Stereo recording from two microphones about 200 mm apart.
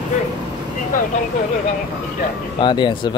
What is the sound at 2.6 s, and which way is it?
Speech, 20° left (ahead or behind).